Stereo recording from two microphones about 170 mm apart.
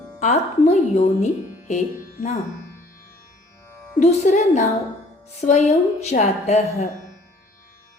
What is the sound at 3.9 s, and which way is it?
A woman's voice, 45° left (ahead or behind).